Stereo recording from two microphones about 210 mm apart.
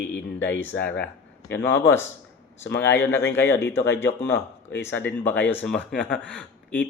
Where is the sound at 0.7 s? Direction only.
5° left (ahead or behind).